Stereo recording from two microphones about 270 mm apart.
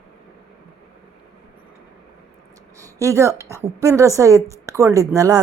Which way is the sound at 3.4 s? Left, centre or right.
Centre.